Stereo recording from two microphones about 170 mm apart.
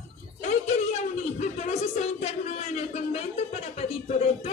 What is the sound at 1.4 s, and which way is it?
Speech, 40° left (ahead or behind).